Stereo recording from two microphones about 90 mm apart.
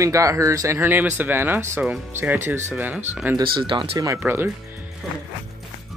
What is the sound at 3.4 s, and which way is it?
Speech, 65° right (ahead or behind).